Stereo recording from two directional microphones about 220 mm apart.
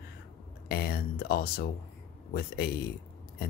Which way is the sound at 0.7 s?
45° left (ahead or behind).